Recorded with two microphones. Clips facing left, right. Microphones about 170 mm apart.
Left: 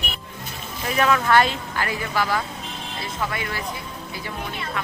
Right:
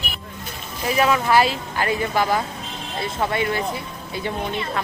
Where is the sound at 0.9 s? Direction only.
10° right (ahead or behind).